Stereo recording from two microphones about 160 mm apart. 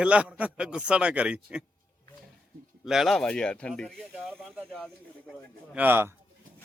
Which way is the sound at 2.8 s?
Centre (ahead or behind).